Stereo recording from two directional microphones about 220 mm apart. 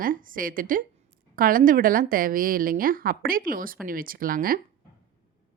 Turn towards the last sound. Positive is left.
turn(degrees=-40)  # may be behind; listen again after turning